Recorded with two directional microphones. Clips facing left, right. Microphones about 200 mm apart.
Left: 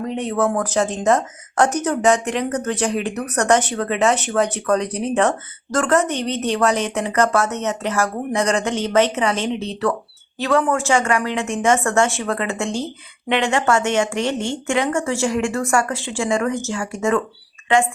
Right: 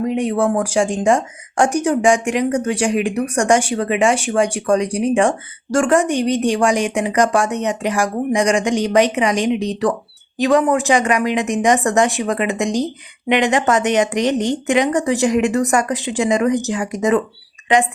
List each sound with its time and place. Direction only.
0.0 s a woman's voice: 10° right (ahead or behind)